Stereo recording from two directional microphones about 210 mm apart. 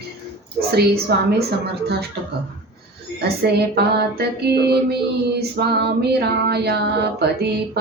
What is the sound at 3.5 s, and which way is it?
Female singing, 50° right (ahead or behind).